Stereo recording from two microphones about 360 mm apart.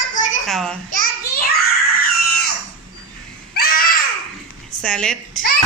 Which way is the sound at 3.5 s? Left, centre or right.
Left.